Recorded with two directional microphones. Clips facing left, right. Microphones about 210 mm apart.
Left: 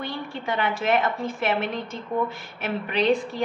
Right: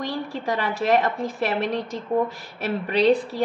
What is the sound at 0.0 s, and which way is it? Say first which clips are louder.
A woman's voice: right 3 dB; 35° right (ahead or behind).